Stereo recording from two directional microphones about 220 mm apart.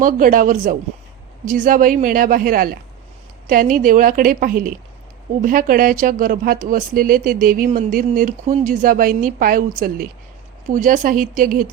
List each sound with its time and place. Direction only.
0.0 s a woman's voice: 35° right (ahead or behind)